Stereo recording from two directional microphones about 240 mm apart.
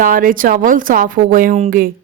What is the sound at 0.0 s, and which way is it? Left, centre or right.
A woman's voice, right.